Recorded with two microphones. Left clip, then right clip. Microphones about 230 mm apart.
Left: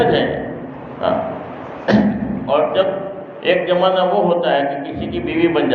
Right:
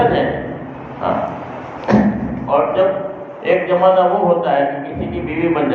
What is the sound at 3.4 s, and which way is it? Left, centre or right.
Speech, left.